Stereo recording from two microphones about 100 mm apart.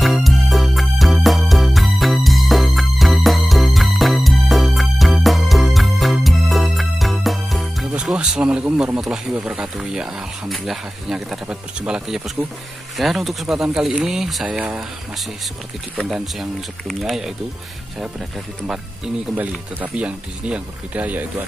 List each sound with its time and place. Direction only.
0.0 s music: centre (ahead or behind)
7.9 s speech: 10° right (ahead or behind)
12.9 s speech: centre (ahead or behind)
16.0 s speech: centre (ahead or behind)
19.8 s speech: 10° right (ahead or behind)